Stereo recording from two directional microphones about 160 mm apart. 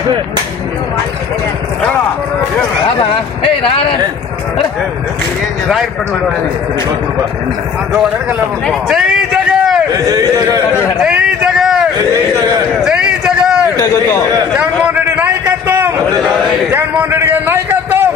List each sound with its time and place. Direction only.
3.0 s speech: 35° left (ahead or behind)
7.9 s a man's voice: 5° right (ahead or behind)
9.9 s speech: 20° right (ahead or behind)
11.0 s speech: 5° right (ahead or behind)
12.1 s speech: 20° right (ahead or behind)
12.8 s a sound: 5° right (ahead or behind)
13.7 s a man's voice: 15° left (ahead or behind)
14.5 s a sound: 10° right (ahead or behind)
16.7 s a man's voice: 15° right (ahead or behind)